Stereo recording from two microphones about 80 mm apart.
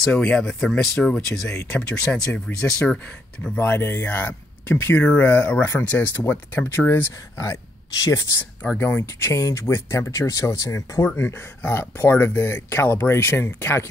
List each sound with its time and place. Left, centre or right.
0.0 s speech: centre
3.5 s speech: left